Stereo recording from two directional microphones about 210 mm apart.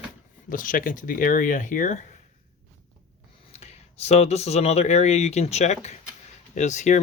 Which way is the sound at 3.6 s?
30° left (ahead or behind).